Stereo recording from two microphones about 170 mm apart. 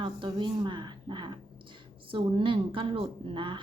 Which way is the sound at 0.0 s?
30° right (ahead or behind).